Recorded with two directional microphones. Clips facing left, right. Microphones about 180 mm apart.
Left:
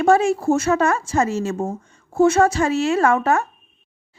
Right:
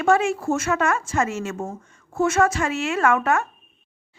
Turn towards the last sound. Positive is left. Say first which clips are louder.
# left 3 dB
turn(degrees=35)  # may be behind; listen again after turning